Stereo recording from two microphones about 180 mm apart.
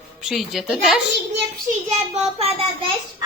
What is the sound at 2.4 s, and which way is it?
Speech, 35° right (ahead or behind).